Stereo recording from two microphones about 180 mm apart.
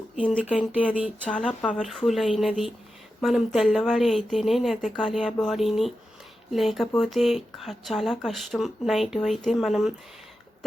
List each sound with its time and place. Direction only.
0.4 s speech: 5° right (ahead or behind)
1.4 s speech: 5° left (ahead or behind)